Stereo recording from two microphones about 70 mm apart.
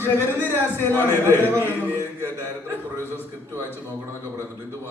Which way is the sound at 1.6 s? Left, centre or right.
Left.